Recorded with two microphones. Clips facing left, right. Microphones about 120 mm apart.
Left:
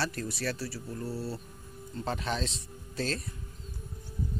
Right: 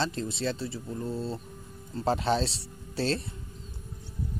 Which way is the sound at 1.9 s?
30° right (ahead or behind).